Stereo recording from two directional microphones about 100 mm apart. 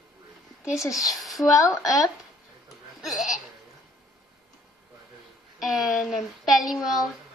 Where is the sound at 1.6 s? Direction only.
35° left (ahead or behind).